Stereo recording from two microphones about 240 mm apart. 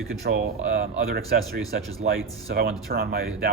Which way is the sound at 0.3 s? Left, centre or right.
Right.